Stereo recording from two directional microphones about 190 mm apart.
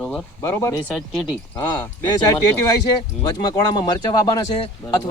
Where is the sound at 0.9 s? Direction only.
Centre (ahead or behind).